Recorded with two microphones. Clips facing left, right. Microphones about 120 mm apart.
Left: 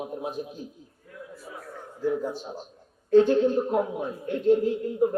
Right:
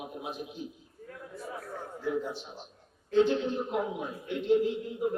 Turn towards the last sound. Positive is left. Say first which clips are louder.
# left 4 dB
turn(degrees=45)  # may be behind; listen again after turning